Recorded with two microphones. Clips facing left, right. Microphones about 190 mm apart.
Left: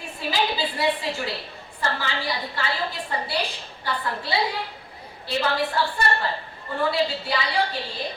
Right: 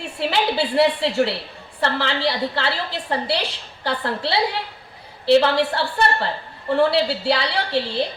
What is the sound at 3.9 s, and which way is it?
A woman's voice, 75° right (ahead or behind).